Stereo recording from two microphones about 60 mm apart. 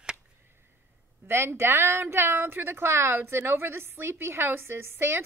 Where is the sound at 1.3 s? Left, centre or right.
Right.